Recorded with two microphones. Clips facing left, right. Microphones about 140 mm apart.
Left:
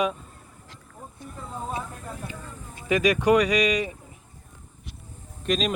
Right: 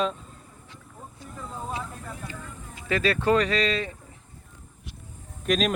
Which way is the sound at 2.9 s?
15° left (ahead or behind).